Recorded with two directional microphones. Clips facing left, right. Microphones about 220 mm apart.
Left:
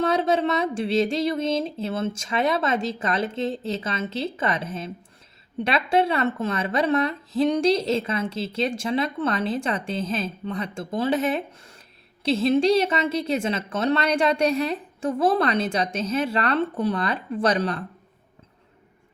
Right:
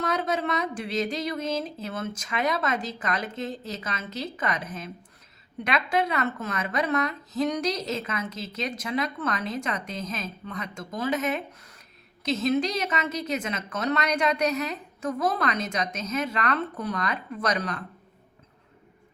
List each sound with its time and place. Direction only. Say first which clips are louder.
0.0 s a woman's voice: left 6 dB; 30° left (ahead or behind)